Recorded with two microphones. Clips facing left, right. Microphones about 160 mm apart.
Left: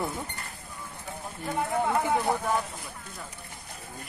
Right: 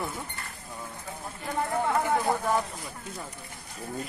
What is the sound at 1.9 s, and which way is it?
Speech, 10° left (ahead or behind).